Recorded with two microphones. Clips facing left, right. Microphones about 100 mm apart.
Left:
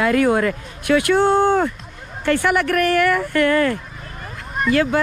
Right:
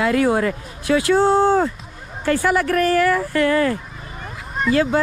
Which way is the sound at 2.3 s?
65° left (ahead or behind).